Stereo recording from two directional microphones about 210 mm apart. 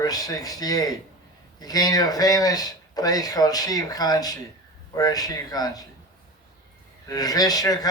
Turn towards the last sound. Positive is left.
turn(degrees=15)  # may be behind; listen again after turning